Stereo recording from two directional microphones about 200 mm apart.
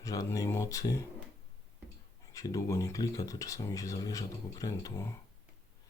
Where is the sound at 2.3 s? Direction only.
15° left (ahead or behind).